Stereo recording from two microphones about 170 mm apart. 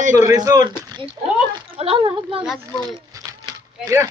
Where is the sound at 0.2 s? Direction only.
20° right (ahead or behind).